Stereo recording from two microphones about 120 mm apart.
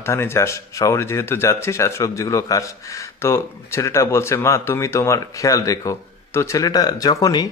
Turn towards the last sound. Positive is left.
turn(degrees=30)  # may be behind; listen again after turning